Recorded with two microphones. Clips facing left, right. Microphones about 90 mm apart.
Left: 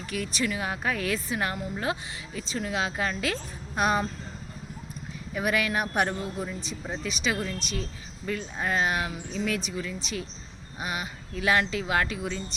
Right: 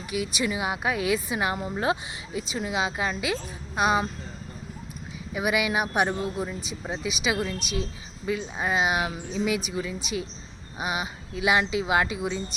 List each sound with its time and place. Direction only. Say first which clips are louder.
0.1 s speech: right 2 dB; 10° right (ahead or behind)
1.5 s speech: right 4 dB; 25° right (ahead or behind)
2.5 s speech: right 1 dB; 10° right (ahead or behind)
5.3 s speech: right 2 dB; 10° right (ahead or behind)